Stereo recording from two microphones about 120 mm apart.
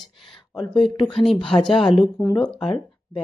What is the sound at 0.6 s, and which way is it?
Speech, 40° left (ahead or behind).